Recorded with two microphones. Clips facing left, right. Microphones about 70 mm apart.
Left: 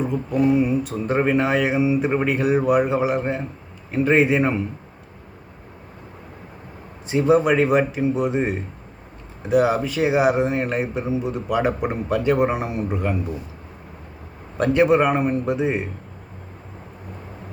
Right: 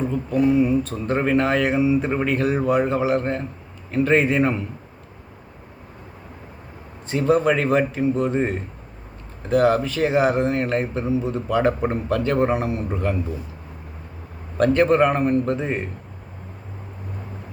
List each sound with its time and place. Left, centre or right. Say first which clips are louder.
0.0 s a man's voice: even; centre
7.1 s a man's voice: left 1 dB; centre
14.6 s a man's voice: even; centre